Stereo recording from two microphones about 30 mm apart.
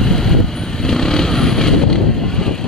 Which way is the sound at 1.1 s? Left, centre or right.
Centre.